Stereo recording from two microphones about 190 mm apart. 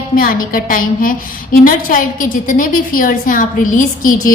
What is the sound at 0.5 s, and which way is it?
A woman's voice, 45° left (ahead or behind).